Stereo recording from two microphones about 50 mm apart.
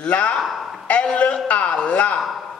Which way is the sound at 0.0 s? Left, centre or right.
Left.